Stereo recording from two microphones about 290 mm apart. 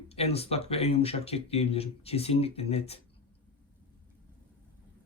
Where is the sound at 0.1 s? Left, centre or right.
Left.